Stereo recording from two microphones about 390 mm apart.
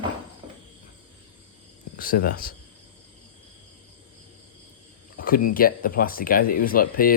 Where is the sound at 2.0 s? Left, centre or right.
Left.